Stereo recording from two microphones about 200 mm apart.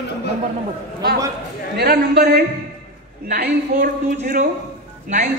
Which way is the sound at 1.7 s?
50° right (ahead or behind).